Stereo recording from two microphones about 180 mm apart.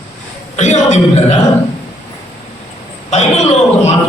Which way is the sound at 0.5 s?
40° left (ahead or behind).